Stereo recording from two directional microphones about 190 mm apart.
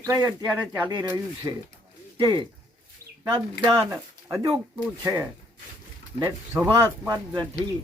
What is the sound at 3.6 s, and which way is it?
Speech, 15° right (ahead or behind).